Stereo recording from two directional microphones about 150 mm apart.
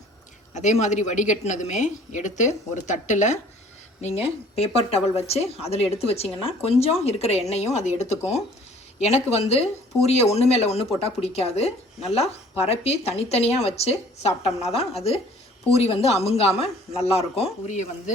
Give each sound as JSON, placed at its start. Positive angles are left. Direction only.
{"t": 0.5, "sound": "speech", "side_deg": 50}
{"t": 4.0, "sound": "speech", "side_deg": 45}